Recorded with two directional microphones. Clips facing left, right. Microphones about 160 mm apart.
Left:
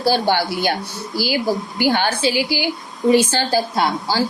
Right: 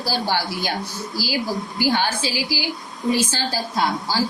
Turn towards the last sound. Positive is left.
turn(degrees=65)  # may be behind; listen again after turning